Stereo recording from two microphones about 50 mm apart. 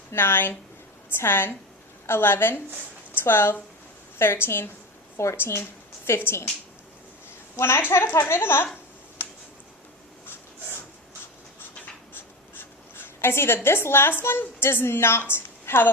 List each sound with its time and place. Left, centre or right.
0.1 s a woman's voice: left
7.5 s a woman's voice: left
7.8 s speech: left
9.2 s a sound: left
12.1 s speech: left